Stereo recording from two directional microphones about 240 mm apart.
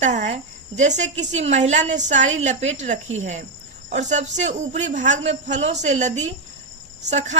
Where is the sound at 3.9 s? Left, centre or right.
Right.